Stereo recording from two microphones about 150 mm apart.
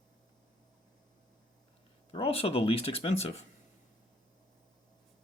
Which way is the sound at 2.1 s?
40° left (ahead or behind).